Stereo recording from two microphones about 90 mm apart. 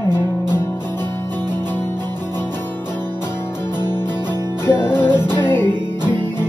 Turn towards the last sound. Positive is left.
turn(degrees=25)  # may be behind; listen again after turning